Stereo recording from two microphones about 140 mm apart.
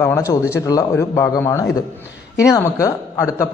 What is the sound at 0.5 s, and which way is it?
A man's voice, 25° left (ahead or behind).